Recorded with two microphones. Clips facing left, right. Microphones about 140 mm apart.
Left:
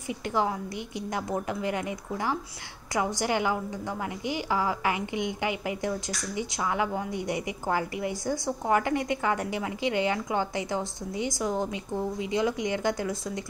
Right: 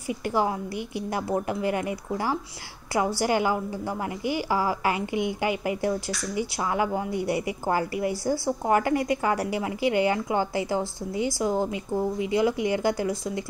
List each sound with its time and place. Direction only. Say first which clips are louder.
0.3 s speech: right 2 dB; 30° right (ahead or behind)
2.9 s speech: right 3 dB; 30° right (ahead or behind)
6.6 s a woman's voice: right 2 dB; 30° right (ahead or behind)